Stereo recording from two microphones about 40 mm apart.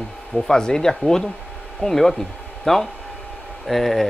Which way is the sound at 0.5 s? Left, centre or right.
Centre.